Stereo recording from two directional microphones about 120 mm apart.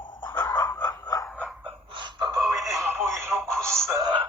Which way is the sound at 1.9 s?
40° right (ahead or behind).